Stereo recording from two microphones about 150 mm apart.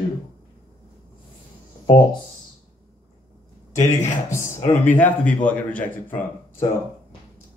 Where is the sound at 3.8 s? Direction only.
20° left (ahead or behind).